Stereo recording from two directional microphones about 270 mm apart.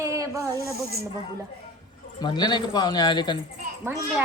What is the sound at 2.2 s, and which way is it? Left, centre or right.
Speech, centre.